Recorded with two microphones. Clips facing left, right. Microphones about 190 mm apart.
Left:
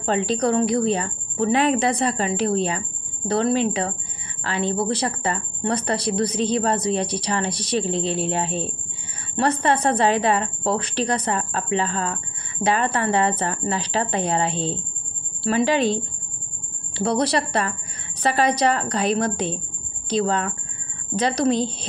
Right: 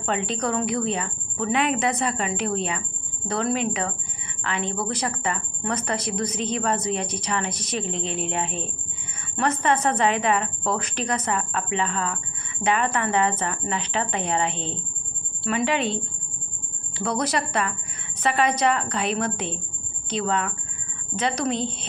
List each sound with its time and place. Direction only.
0.0 s a woman's voice: 35° left (ahead or behind)